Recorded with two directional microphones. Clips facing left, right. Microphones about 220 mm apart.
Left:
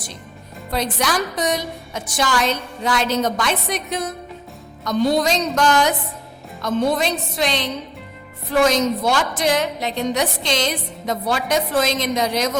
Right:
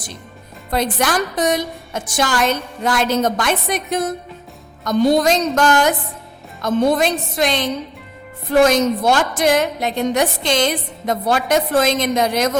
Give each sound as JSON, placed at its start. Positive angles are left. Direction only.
{"t": 0.7, "sound": "a woman's voice", "side_deg": -50}